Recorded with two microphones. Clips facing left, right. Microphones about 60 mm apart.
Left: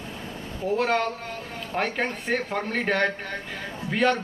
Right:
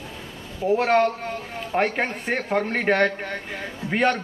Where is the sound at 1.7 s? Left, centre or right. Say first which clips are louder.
Right 4 dB; centre.